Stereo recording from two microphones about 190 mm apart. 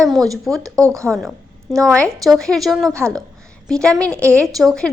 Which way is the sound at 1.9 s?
5° left (ahead or behind).